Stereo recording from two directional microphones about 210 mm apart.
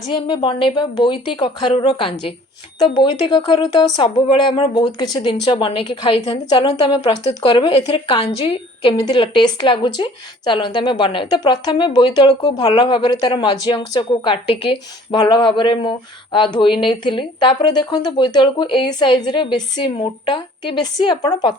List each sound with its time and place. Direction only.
0.1 s speech: 20° left (ahead or behind)